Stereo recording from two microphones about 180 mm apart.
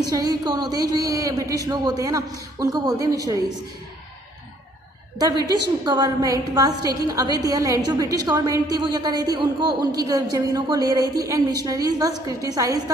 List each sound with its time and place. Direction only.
0.0 s a woman's voice: 20° right (ahead or behind)
5.9 s a woman's voice: 20° right (ahead or behind)